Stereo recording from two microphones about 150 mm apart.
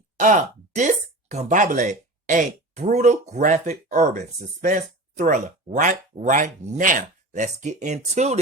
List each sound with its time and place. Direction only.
0.2 s speech: 55° right (ahead or behind)